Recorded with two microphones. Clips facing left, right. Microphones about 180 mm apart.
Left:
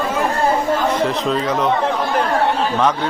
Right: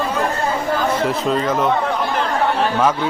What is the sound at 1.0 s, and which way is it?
Speech, centre (ahead or behind).